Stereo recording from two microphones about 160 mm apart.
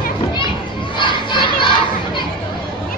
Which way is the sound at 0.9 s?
30° left (ahead or behind).